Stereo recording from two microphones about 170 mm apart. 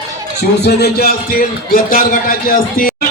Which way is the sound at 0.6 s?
70° left (ahead or behind).